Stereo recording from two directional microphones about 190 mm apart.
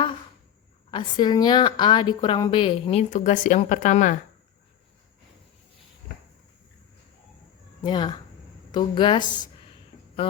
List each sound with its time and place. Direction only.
0.9 s speech: 25° left (ahead or behind); by 4.2 s 40° left (ahead or behind)
7.8 s speech: 20° left (ahead or behind)